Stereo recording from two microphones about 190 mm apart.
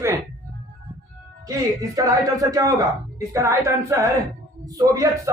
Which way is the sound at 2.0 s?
20° right (ahead or behind).